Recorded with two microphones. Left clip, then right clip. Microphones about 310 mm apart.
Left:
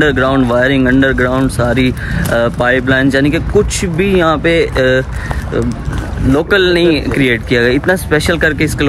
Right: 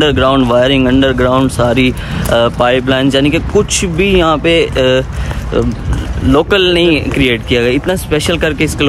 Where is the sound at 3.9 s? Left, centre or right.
Centre.